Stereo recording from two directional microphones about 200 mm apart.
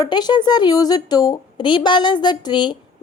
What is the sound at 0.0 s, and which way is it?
A woman's voice, 20° left (ahead or behind).